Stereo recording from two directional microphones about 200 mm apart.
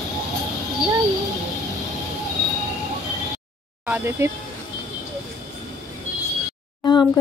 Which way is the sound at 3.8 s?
10° right (ahead or behind).